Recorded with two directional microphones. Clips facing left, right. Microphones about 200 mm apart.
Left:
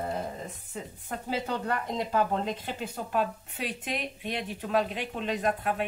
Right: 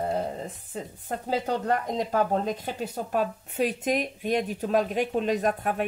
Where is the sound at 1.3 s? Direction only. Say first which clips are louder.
Right 5 dB; 40° right (ahead or behind).